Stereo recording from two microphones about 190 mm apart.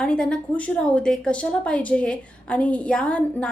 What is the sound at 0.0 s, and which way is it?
A woman's voice, 5° left (ahead or behind).